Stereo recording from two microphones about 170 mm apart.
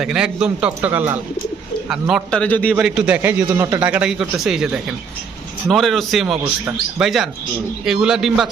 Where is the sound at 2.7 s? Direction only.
5° right (ahead or behind).